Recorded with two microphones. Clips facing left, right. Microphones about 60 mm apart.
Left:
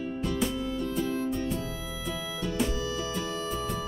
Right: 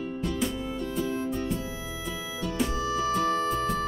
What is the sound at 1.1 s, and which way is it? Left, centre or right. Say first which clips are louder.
Music: even; centre.